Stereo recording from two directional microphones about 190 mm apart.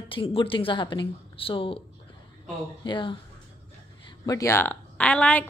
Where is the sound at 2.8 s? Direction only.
25° left (ahead or behind).